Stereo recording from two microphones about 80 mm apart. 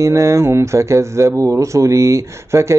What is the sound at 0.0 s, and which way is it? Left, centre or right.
Speech, right.